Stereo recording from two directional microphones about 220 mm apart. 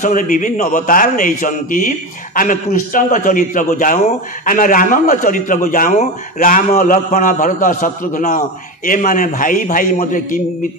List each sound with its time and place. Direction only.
0.0 s a man's voice: 35° left (ahead or behind)